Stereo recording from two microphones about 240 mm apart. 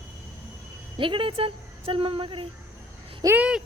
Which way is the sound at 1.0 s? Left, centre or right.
Right.